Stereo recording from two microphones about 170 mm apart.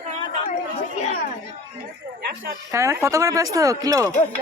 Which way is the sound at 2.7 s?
15° right (ahead or behind).